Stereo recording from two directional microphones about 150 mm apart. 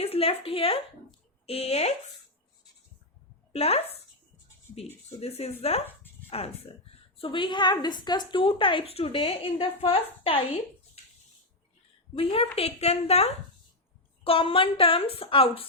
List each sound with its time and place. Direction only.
0.0 s a woman's voice: 40° left (ahead or behind)
3.5 s a woman's voice: 45° left (ahead or behind)
5.2 s a woman's voice: 45° left (ahead or behind)
5.9 s a sound: 15° left (ahead or behind)
6.3 s a woman's voice: 40° left (ahead or behind)
12.1 s a woman's voice: 40° left (ahead or behind)